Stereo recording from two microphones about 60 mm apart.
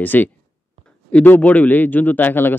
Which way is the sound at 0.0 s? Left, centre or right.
Left.